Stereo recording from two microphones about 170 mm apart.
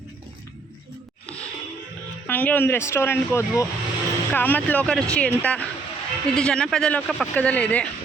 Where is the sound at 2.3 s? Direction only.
10° left (ahead or behind).